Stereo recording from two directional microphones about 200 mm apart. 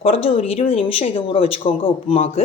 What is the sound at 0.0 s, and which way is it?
A woman's voice, 30° left (ahead or behind).